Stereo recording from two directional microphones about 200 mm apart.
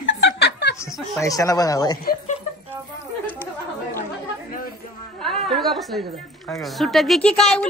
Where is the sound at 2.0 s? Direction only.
45° left (ahead or behind).